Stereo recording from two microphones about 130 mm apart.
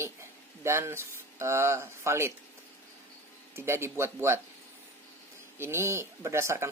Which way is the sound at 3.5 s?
20° right (ahead or behind).